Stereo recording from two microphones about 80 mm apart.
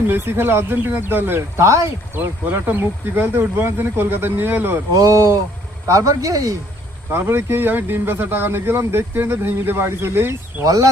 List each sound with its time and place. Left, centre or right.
0.1 s speech: right
4.9 s speech: right
7.1 s speech: right
10.6 s speech: right